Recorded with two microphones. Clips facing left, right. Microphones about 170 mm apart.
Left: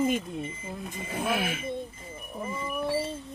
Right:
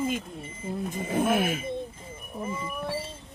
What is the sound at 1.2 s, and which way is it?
Speech, 50° right (ahead or behind).